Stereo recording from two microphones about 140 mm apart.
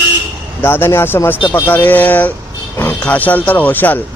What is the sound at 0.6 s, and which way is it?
Speech, 15° left (ahead or behind).